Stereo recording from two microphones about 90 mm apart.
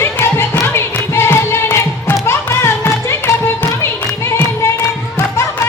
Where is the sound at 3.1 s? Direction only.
30° left (ahead or behind).